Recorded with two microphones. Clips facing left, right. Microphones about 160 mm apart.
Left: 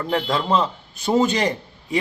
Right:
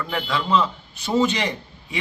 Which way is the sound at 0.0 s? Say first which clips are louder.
Left 4 dB; 30° left (ahead or behind).